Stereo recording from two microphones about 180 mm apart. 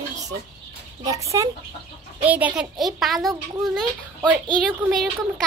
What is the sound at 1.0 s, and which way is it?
Speech, 20° right (ahead or behind).